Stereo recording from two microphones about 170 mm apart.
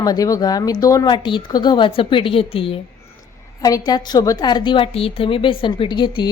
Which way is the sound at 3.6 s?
20° left (ahead or behind).